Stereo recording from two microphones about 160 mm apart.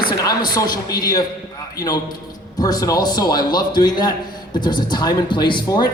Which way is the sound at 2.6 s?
25° left (ahead or behind).